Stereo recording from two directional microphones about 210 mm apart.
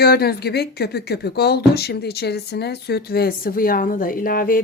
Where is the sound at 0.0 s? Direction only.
50° left (ahead or behind).